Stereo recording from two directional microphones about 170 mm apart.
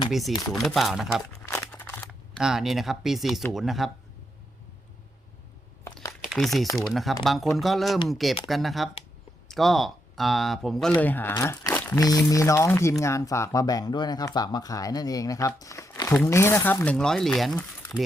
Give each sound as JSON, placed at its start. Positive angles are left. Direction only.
{"t": 0.1, "sound": "speech", "side_deg": 0}
{"t": 0.3, "sound": "speech", "side_deg": 20}
{"t": 0.6, "sound": "speech", "side_deg": 0}
{"t": 1.5, "sound": "a sound", "side_deg": 10}
{"t": 2.4, "sound": "speech", "side_deg": -5}
{"t": 5.9, "sound": "crumpling", "side_deg": 20}
{"t": 6.3, "sound": "speech", "side_deg": 0}